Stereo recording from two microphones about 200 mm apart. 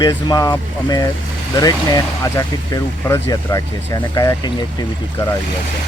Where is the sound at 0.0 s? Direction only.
20° left (ahead or behind).